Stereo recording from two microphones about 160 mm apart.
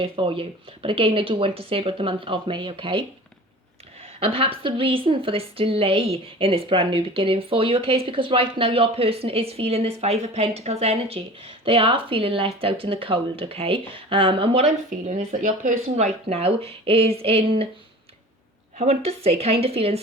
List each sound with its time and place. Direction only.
0.0 s a woman's voice: 35° right (ahead or behind)
4.2 s a woman's voice: 35° right (ahead or behind)
18.8 s a woman's voice: 40° right (ahead or behind)